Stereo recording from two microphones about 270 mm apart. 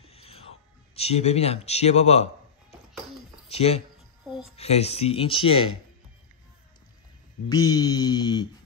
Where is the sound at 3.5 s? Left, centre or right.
Left.